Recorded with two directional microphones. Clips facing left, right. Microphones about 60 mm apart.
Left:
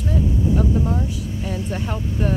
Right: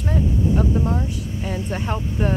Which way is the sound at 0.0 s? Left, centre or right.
Right.